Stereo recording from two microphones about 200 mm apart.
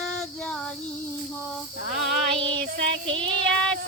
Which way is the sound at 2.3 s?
25° right (ahead or behind).